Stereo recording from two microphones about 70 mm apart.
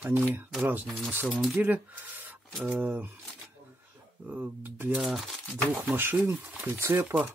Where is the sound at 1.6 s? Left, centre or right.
Right.